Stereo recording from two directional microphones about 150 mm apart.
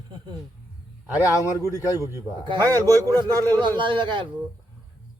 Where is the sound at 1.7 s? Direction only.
20° left (ahead or behind).